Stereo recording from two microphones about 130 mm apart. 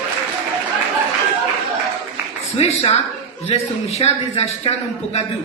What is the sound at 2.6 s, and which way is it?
A woman's voice, 55° left (ahead or behind).